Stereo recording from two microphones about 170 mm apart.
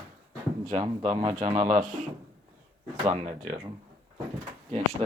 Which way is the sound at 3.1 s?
40° right (ahead or behind).